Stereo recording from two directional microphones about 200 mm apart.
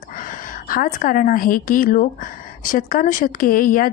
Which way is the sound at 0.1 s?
40° left (ahead or behind).